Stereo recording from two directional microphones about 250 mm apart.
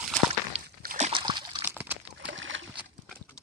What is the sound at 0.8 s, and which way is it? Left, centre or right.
Splash, right.